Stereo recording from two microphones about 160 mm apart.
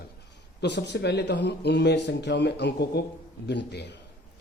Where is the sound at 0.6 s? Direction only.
90° left.